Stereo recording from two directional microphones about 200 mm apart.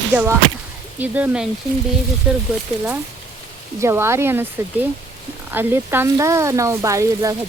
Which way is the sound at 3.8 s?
15° right (ahead or behind).